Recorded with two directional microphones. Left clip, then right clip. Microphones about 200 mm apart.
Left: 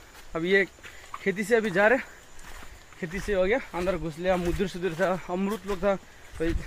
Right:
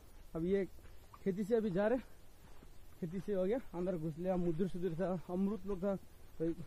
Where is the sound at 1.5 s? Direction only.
15° left (ahead or behind).